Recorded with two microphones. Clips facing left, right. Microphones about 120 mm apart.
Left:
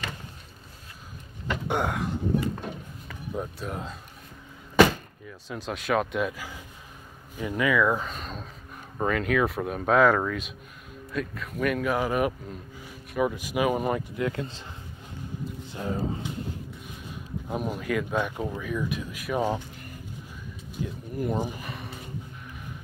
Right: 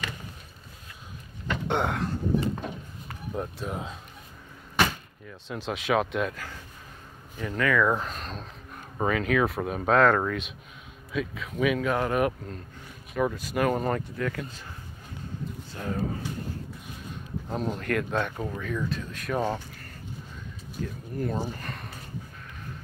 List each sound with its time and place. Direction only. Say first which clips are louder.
1.5 s a sound: even; 5° left (ahead or behind)
3.3 s speech: even; centre (ahead or behind)
5.5 s speech: right 1 dB; centre (ahead or behind)
7.8 s speech: even; centre (ahead or behind); by 14.6 s 25° left (ahead or behind)
15.7 s speech: left 1 dB; 20° left (ahead or behind)
17.5 s speech: even; 10° left (ahead or behind)